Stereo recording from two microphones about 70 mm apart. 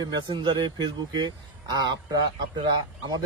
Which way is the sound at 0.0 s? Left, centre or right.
Right.